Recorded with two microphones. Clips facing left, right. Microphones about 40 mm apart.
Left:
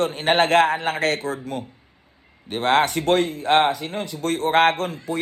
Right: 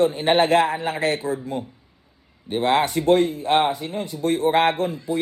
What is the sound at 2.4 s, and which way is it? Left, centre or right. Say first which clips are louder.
A man's voice: left 1 dB; left.